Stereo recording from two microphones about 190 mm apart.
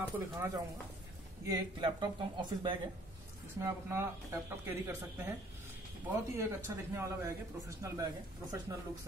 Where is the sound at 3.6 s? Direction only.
15° right (ahead or behind).